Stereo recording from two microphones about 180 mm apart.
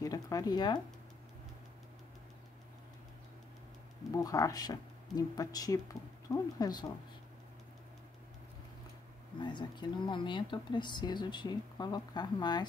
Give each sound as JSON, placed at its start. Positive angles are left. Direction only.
{"t": 0.0, "sound": "speech", "side_deg": 20}
{"t": 4.2, "sound": "speech", "side_deg": 20}
{"t": 9.4, "sound": "speech", "side_deg": 25}